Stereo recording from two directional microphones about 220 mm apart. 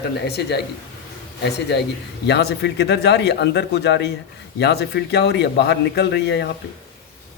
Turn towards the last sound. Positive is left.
turn(degrees=50)  # may be behind; listen again after turning